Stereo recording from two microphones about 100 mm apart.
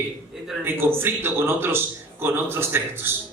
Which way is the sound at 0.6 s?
20° right (ahead or behind).